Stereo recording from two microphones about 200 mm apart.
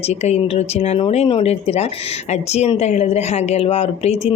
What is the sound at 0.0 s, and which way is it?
Speech, 30° left (ahead or behind).